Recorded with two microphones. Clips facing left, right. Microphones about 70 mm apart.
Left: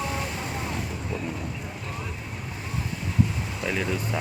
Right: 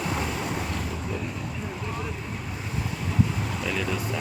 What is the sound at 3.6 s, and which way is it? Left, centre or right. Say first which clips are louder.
Speech: left 2 dB; left.